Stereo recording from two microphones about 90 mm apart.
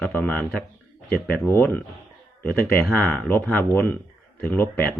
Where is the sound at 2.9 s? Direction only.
10° left (ahead or behind).